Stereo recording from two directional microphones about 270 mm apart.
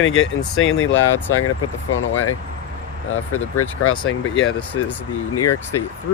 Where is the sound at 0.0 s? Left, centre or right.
Left.